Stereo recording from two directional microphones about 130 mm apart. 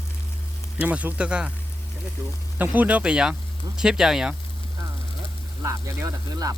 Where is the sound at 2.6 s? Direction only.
10° right (ahead or behind).